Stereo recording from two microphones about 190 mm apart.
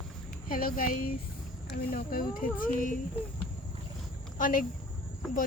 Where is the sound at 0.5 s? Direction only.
50° left (ahead or behind).